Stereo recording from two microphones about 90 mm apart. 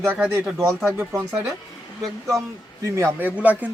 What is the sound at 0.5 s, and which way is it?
Speech, 30° right (ahead or behind).